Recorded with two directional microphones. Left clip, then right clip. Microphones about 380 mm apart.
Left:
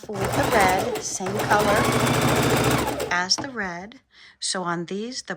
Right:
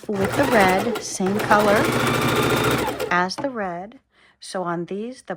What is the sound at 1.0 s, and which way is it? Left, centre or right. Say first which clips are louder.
Speech: right 3 dB; centre.